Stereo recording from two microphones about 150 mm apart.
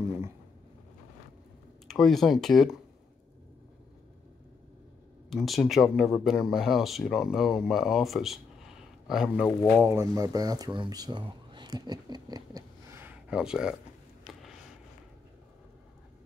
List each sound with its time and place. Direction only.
1.9 s speech: centre (ahead or behind)
5.3 s speech: centre (ahead or behind)
9.7 s speech: 15° right (ahead or behind)
13.0 s a sound: 10° right (ahead or behind)